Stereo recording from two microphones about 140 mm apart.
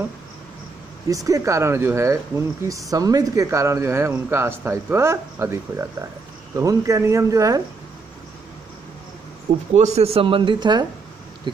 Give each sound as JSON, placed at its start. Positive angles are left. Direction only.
{"t": 1.0, "sound": "speech", "side_deg": -25}
{"t": 9.8, "sound": "speech", "side_deg": -50}